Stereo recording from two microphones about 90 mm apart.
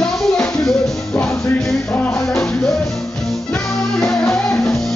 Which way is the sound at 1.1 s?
25° left (ahead or behind).